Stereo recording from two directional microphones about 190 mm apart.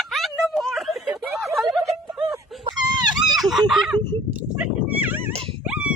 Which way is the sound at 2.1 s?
5° right (ahead or behind).